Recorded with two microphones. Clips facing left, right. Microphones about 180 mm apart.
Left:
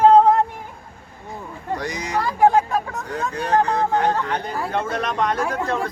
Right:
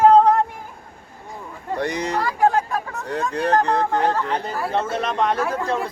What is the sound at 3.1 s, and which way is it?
Speech, 65° right (ahead or behind).